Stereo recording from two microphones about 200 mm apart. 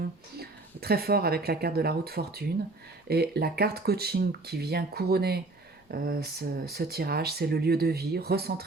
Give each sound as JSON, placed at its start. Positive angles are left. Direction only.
{"t": 0.3, "sound": "speech", "side_deg": -50}